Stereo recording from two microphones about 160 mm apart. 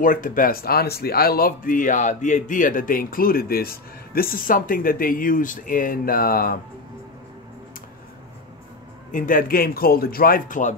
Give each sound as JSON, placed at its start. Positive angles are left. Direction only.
{"t": 0.0, "sound": "speech", "side_deg": 55}
{"t": 9.1, "sound": "speech", "side_deg": 60}